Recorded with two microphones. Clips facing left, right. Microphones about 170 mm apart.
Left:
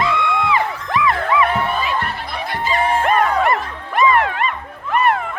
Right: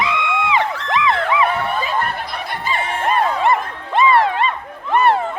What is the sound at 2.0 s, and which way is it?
Snicker, 50° right (ahead or behind).